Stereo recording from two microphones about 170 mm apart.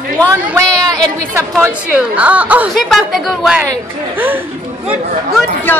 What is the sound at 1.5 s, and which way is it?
A woman's voice, 10° right (ahead or behind).